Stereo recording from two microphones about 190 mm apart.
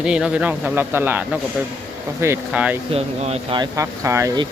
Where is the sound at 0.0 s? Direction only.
5° right (ahead or behind).